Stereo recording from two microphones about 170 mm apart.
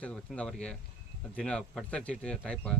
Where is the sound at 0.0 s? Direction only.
5° left (ahead or behind).